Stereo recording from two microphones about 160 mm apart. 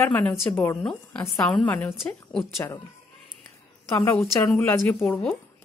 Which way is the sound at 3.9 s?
20° left (ahead or behind).